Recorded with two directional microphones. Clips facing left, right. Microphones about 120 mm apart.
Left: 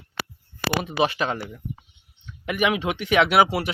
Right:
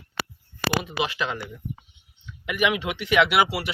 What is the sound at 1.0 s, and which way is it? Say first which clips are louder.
Speech: left 5 dB; 35° left (ahead or behind).